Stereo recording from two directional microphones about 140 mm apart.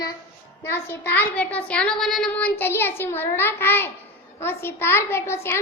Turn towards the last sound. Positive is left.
turn(degrees=15)  # may be behind; listen again after turning